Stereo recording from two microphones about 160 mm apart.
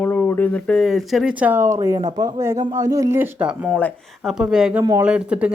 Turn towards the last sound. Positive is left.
turn(degrees=-5)  # may be behind; listen again after turning